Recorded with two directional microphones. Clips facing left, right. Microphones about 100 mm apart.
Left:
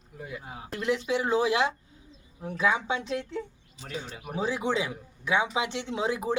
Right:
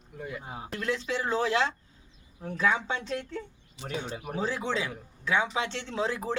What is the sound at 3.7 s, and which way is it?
Speech, 60° right (ahead or behind).